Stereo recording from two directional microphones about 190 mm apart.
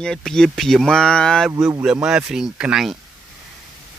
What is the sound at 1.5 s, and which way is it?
Speech, 15° right (ahead or behind).